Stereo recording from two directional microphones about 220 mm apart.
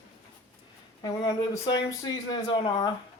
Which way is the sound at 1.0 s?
20° left (ahead or behind).